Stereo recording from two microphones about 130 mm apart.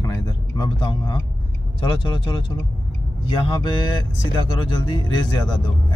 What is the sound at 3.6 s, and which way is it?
Speech, 35° left (ahead or behind).